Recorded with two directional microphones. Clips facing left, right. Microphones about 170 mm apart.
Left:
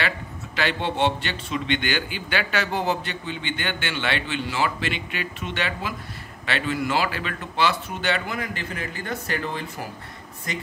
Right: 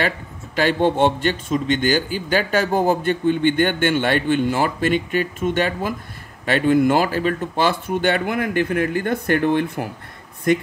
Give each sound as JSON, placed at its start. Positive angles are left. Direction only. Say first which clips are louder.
{"t": 0.6, "sound": "a man's voice", "louder": "right 7 dB", "side_deg": -45}